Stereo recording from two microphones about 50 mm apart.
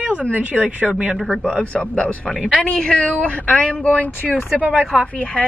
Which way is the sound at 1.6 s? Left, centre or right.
Left.